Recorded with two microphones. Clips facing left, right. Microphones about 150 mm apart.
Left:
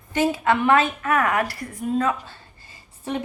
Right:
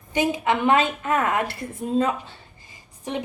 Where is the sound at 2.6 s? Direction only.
15° right (ahead or behind).